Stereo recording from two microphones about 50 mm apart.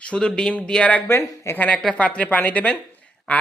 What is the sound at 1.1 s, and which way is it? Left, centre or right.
Speech, left.